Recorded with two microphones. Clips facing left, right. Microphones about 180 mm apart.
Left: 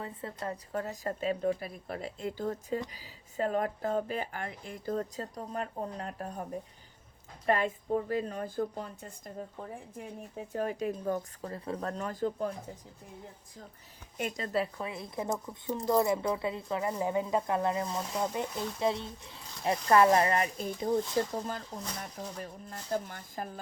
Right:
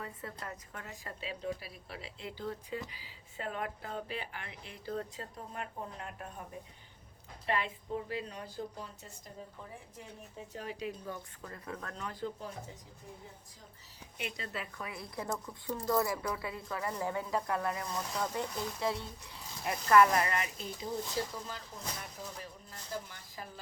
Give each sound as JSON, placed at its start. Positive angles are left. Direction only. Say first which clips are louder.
{"t": 0.0, "sound": "a woman's voice", "louder": "left 5 dB", "side_deg": 25}
{"t": 7.4, "sound": "a woman's voice", "louder": "left 6 dB", "side_deg": 45}
{"t": 11.4, "sound": "speech", "louder": "left 5 dB", "side_deg": 30}
{"t": 14.2, "sound": "a woman's voice", "louder": "left 9 dB", "side_deg": 45}